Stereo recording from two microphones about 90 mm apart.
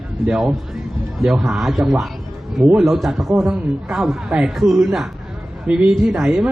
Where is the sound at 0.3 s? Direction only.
10° right (ahead or behind).